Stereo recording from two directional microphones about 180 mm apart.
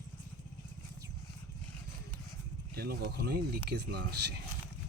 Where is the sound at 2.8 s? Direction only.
60° right (ahead or behind).